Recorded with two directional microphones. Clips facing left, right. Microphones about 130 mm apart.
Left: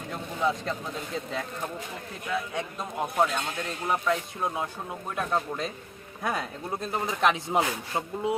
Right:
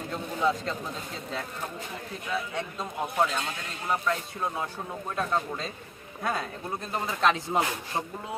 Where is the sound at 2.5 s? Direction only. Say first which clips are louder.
Left 1 dB; 10° left (ahead or behind).